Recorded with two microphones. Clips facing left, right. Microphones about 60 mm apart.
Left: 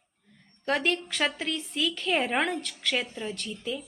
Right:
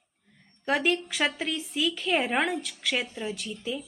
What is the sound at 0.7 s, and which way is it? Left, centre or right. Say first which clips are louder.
A woman's voice: right 1 dB; centre.